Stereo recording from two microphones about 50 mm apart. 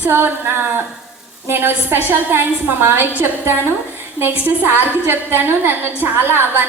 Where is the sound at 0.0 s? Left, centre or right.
Right.